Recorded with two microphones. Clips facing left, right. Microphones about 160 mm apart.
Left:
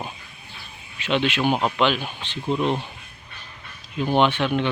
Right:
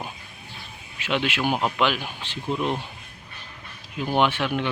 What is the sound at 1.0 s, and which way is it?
Speech, 5° right (ahead or behind).